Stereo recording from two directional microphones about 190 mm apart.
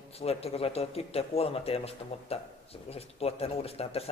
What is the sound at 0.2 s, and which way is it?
Speech, 30° left (ahead or behind).